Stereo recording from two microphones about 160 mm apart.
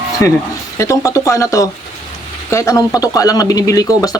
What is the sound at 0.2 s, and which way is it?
Speech, 20° left (ahead or behind).